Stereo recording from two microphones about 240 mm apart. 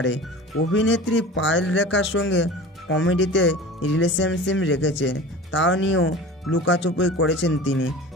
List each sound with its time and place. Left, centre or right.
0.7 s speech: left